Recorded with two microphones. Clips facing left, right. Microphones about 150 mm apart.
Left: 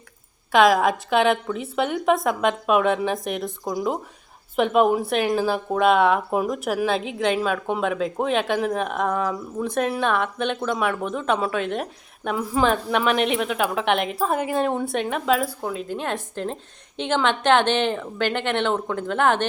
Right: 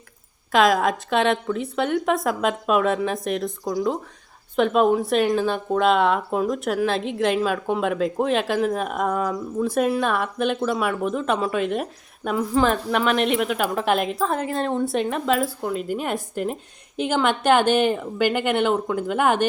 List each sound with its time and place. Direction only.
0.5 s speech: centre (ahead or behind)
3.6 s speech: 20° left (ahead or behind)
4.5 s a woman's voice: 5° left (ahead or behind)